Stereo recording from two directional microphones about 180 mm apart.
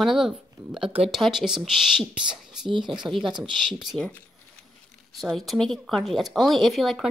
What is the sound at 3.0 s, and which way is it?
Speech, 25° right (ahead or behind).